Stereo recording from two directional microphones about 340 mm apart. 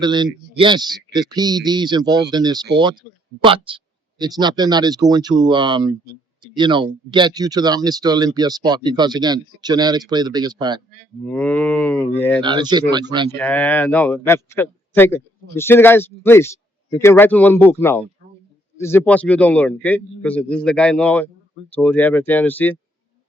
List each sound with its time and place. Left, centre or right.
0.0 s speech: centre
11.3 s a man's voice: centre
12.4 s speech: centre
13.4 s a man's voice: centre